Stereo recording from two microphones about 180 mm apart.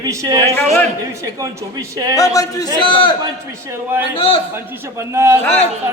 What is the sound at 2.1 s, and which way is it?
A man's voice, 20° left (ahead or behind).